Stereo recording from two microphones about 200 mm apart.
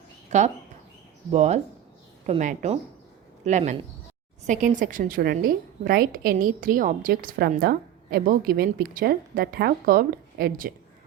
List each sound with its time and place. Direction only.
0.3 s a woman's voice: 35° right (ahead or behind)